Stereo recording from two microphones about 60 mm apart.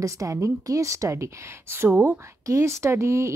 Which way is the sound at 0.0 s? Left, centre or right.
Right.